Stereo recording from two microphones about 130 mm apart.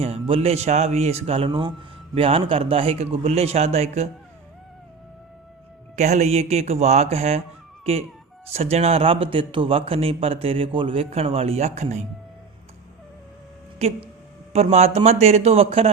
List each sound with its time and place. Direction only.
0.0 s a man's voice: 50° right (ahead or behind)
1.5 s a man's voice: 40° right (ahead or behind); by 4.1 s 55° right (ahead or behind)
6.0 s a man's voice: 60° right (ahead or behind)
13.8 s a man's voice: 55° right (ahead or behind)